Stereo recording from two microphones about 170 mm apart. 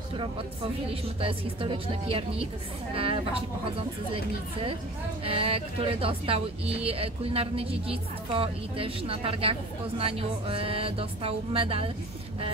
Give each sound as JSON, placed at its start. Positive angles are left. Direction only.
{"t": 1.2, "sound": "speech", "side_deg": -30}